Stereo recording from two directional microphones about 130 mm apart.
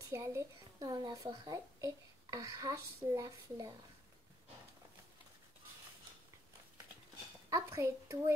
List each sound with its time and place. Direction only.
0.1 s a child's voice: 20° right (ahead or behind)
0.7 s a child's voice: 30° right (ahead or behind)
7.4 s a sound: 25° right (ahead or behind)